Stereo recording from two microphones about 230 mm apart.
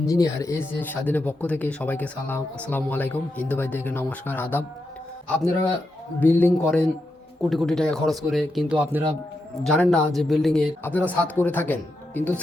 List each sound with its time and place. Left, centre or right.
0.1 s speech: centre
6.1 s speech: centre
9.6 s speech: centre